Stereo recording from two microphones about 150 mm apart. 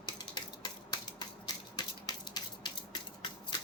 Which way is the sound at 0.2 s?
30° left (ahead or behind).